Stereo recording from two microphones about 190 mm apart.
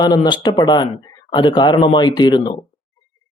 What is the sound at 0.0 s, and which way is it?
Speech, 20° left (ahead or behind).